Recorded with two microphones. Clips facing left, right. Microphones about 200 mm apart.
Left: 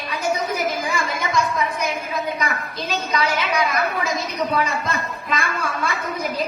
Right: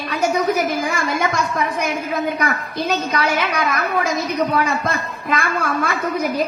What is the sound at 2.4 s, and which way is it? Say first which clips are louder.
A woman's voice: right 5 dB; 55° right (ahead or behind).